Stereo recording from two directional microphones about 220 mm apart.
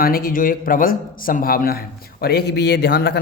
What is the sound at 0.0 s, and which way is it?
A man's voice, 40° left (ahead or behind).